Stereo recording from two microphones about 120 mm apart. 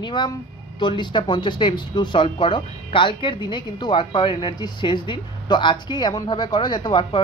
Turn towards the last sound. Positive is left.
turn(degrees=40)  # may be behind; listen again after turning